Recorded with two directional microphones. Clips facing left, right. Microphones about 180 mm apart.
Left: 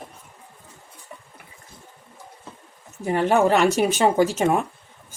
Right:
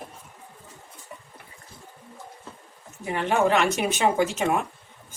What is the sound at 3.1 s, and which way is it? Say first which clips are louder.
Speech: left 4 dB; 40° left (ahead or behind).